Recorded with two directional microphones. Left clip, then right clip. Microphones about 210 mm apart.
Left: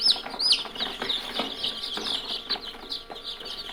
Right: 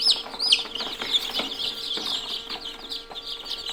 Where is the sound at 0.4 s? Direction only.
5° right (ahead or behind).